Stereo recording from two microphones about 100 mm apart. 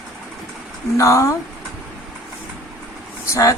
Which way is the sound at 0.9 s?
30° left (ahead or behind).